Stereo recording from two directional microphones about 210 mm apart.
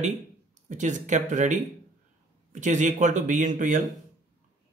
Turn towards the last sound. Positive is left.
turn(degrees=-35)  # may be behind; listen again after turning